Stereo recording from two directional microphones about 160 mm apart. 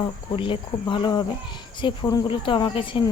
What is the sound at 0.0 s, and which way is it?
Speech, 35° left (ahead or behind).